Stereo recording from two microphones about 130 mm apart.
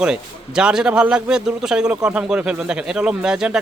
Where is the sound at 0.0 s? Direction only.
5° right (ahead or behind).